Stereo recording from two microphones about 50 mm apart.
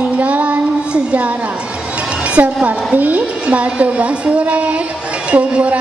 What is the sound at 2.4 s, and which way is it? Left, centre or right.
Speech, right.